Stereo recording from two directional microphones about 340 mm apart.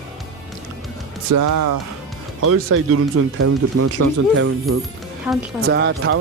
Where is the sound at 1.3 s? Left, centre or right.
Right.